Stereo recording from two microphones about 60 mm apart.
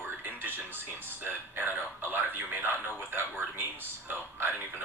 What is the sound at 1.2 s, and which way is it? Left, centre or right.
A man's voice, right.